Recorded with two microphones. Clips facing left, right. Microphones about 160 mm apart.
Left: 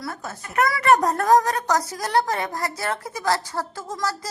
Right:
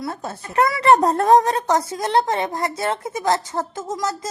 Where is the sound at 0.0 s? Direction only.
25° right (ahead or behind).